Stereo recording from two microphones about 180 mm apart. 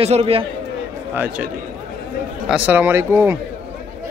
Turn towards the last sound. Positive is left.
turn(degrees=-15)  # may be behind; listen again after turning